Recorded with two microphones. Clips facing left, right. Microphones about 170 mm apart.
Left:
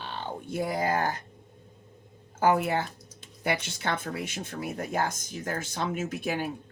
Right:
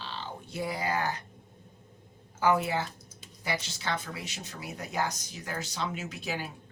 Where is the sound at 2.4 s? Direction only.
50° left (ahead or behind).